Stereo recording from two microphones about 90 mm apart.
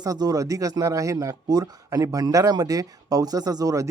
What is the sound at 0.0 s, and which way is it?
Speech, 45° right (ahead or behind).